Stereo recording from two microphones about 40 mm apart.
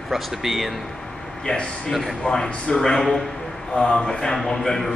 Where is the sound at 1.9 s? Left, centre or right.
Centre.